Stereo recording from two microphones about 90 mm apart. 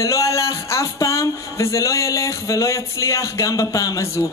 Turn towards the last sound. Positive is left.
turn(degrees=40)  # may be behind; listen again after turning